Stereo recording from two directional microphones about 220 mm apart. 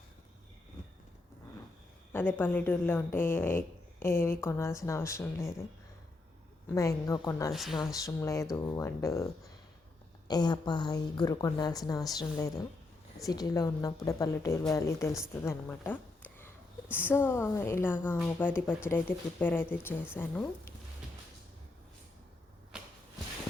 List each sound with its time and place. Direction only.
2.1 s speech: 10° left (ahead or behind)
6.7 s speech: 15° left (ahead or behind)
7.5 s speech: centre (ahead or behind)
8.0 s speech: 15° left (ahead or behind)
10.2 s speech: 20° left (ahead or behind)
22.7 s a sound: 5° right (ahead or behind)